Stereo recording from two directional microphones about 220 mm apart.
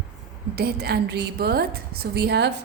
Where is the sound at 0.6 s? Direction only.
45° right (ahead or behind).